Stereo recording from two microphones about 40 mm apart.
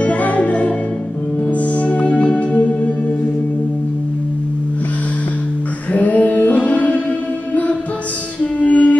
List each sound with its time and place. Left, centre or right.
0.0 s music: left
5.9 s music: left
8.5 s music: left